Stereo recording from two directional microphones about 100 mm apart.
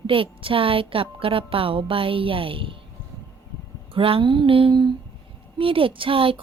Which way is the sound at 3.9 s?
65° right (ahead or behind).